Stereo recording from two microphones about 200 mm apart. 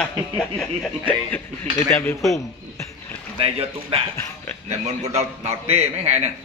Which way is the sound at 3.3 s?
30° right (ahead or behind).